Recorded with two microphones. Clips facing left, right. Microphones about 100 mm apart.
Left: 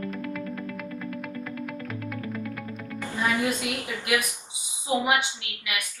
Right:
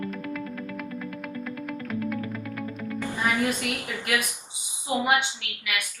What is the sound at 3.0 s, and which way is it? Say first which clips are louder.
Music: left 1 dB; 15° right (ahead or behind).